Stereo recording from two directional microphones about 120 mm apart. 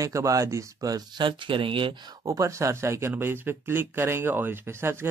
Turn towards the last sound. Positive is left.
turn(degrees=-20)  # may be behind; listen again after turning